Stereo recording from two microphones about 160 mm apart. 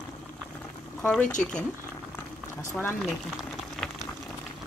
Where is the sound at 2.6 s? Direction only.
20° left (ahead or behind).